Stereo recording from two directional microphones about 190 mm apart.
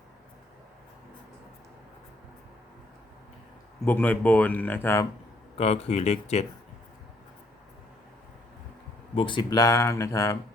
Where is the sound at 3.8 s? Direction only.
10° left (ahead or behind).